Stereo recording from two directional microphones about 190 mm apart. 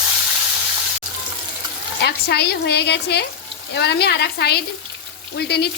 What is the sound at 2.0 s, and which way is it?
A woman's voice, 60° left (ahead or behind).